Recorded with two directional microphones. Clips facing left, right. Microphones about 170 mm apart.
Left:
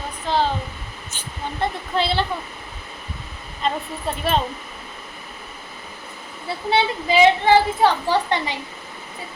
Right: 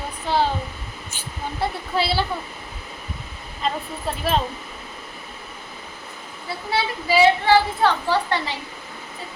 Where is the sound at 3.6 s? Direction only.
Centre (ahead or behind).